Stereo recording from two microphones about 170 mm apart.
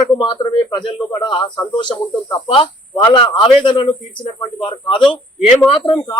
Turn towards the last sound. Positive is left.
turn(degrees=30)  # may be behind; listen again after turning